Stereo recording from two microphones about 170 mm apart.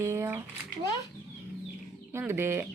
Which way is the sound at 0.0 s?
15° right (ahead or behind).